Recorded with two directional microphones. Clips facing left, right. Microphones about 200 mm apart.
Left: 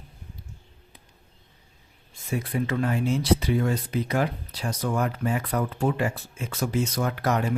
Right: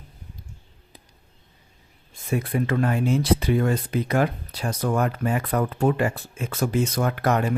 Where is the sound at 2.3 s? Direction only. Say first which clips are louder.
Right 3 dB; 55° right (ahead or behind).